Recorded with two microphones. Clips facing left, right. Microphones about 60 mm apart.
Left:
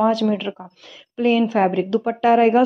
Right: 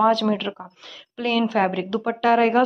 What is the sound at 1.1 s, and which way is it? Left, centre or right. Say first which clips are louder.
A woman's voice: left 4 dB; left.